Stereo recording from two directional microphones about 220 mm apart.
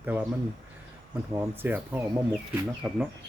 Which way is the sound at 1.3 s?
10° right (ahead or behind).